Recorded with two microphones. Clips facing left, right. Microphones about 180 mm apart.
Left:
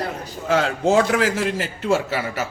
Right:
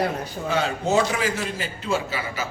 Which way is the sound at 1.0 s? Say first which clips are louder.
Left 5 dB; 80° left.